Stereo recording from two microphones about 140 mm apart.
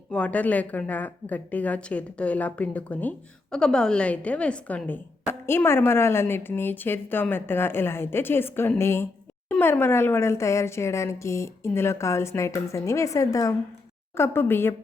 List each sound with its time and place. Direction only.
0.1 s a woman's voice: 10° left (ahead or behind)